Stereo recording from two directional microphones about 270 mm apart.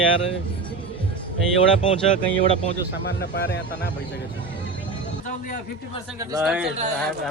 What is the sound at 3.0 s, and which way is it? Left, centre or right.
Speech, left.